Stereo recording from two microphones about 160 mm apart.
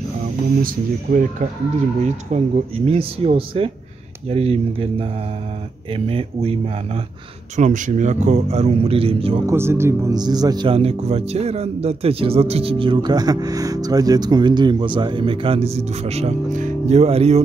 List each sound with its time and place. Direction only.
0.6 s speech: 60° right (ahead or behind)
2.3 s speech: 40° right (ahead or behind)
7.5 s a man's voice: 50° right (ahead or behind)
9.5 s speech: 15° right (ahead or behind); by 17.4 s 40° right (ahead or behind)